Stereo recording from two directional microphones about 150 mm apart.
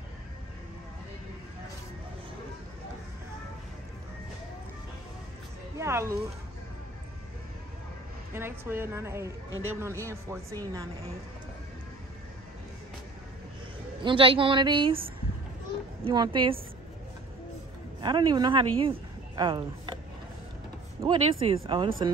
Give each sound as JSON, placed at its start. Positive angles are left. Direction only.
{"t": 5.8, "sound": "speech", "side_deg": -20}
{"t": 8.4, "sound": "a woman's voice", "side_deg": -15}
{"t": 14.0, "sound": "a woman's voice", "side_deg": -35}
{"t": 18.0, "sound": "speech", "side_deg": -30}
{"t": 21.0, "sound": "a woman's voice", "side_deg": -35}